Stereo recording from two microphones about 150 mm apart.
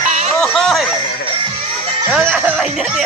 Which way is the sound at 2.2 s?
10° right (ahead or behind).